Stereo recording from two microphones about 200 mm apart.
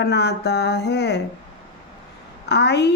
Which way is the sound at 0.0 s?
55° left (ahead or behind).